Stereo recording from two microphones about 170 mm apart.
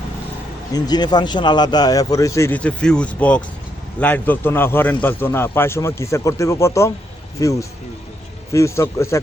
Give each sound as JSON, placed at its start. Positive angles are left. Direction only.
{"t": 0.7, "sound": "a man's voice", "side_deg": 25}